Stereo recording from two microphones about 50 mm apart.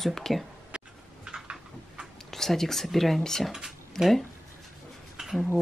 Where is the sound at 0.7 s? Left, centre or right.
Centre.